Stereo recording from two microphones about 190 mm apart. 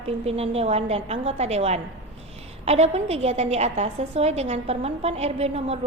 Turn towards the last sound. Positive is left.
turn(degrees=-35)  # may be behind; listen again after turning